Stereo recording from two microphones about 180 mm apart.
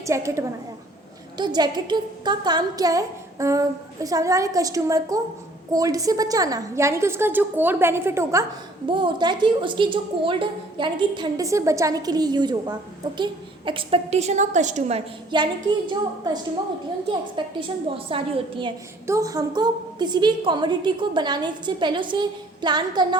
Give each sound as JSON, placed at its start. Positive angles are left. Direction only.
{"t": 0.0, "sound": "a woman's voice", "side_deg": -15}
{"t": 8.9, "sound": "a woman's voice", "side_deg": -25}
{"t": 19.0, "sound": "a woman's voice", "side_deg": -15}